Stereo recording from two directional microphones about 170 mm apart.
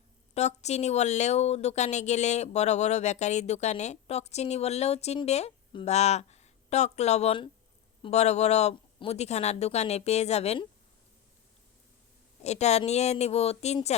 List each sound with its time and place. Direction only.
0.3 s a woman's voice: 40° left (ahead or behind)
12.4 s a woman's voice: 40° left (ahead or behind)